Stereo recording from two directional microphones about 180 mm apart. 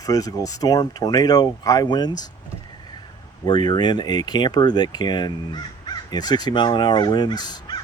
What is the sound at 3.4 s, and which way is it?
Speech, 25° left (ahead or behind).